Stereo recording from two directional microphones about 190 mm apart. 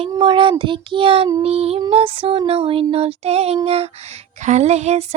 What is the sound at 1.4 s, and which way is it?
Child singing, 30° right (ahead or behind).